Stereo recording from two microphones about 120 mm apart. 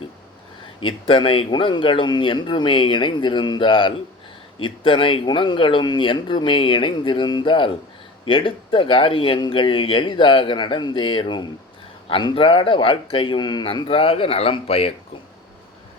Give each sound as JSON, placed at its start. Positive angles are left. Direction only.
{"t": 0.9, "sound": "speech", "side_deg": 45}
{"t": 13.8, "sound": "speech", "side_deg": 50}